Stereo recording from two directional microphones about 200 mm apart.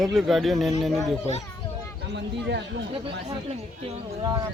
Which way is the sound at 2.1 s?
60° right (ahead or behind).